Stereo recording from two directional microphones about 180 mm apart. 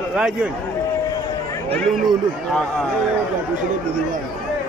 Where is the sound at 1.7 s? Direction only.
Centre (ahead or behind).